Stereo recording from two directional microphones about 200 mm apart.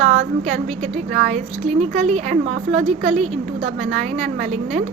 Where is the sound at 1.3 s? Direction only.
35° right (ahead or behind).